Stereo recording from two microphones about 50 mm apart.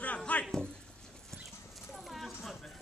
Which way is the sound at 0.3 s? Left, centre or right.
Left.